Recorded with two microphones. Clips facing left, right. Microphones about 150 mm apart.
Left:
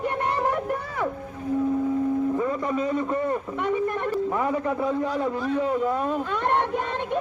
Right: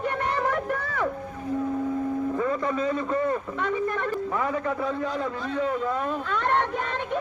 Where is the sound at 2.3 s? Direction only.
20° left (ahead or behind).